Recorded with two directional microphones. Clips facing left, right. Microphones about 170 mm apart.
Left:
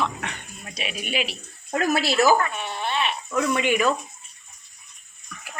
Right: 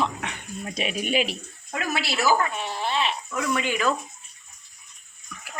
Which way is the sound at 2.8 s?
25° right (ahead or behind).